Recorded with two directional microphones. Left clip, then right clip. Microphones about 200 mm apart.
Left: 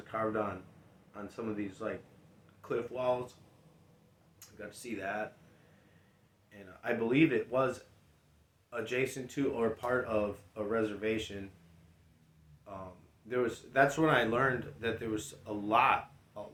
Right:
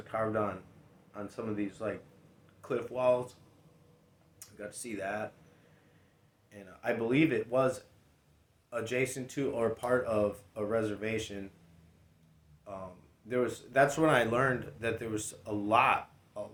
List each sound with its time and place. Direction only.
0.1 s speech: 40° right (ahead or behind)
4.4 s speech: 35° right (ahead or behind)
6.5 s speech: 35° right (ahead or behind)
8.7 s speech: 40° right (ahead or behind)
12.7 s speech: 40° right (ahead or behind)